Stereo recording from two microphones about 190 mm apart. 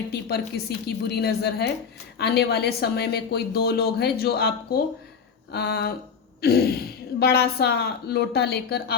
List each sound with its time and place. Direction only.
0.1 s a woman's voice: 55° left (ahead or behind)
6.4 s a sound: 55° left (ahead or behind)
7.2 s a woman's voice: 55° left (ahead or behind)